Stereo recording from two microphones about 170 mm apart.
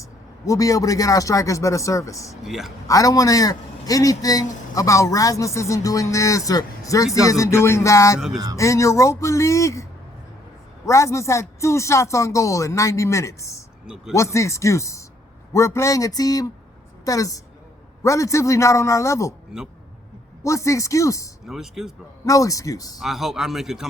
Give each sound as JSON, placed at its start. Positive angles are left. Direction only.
{"t": 0.0, "sound": "a man's voice", "side_deg": 20}
{"t": 2.4, "sound": "speech", "side_deg": 0}
{"t": 2.8, "sound": "a man's voice", "side_deg": 20}
{"t": 10.8, "sound": "speech", "side_deg": 15}
{"t": 13.8, "sound": "speech", "side_deg": -5}
{"t": 14.1, "sound": "a man's voice", "side_deg": 15}
{"t": 20.4, "sound": "speech", "side_deg": 20}
{"t": 21.4, "sound": "speech", "side_deg": 0}
{"t": 22.3, "sound": "a man's voice", "side_deg": 20}
{"t": 23.0, "sound": "speech", "side_deg": 0}